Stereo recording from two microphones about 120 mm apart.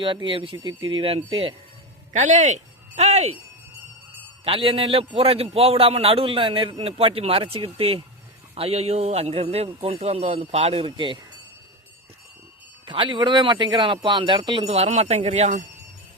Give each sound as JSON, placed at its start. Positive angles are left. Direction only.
{"t": 0.0, "sound": "a man's voice", "side_deg": -45}
{"t": 2.1, "sound": "speech", "side_deg": -85}
{"t": 4.4, "sound": "a man's voice", "side_deg": -50}
{"t": 12.8, "sound": "speech", "side_deg": -45}
{"t": 14.7, "sound": "speech", "side_deg": -65}